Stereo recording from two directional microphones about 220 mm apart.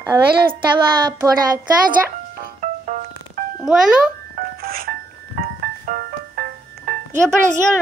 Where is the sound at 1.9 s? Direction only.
35° right (ahead or behind).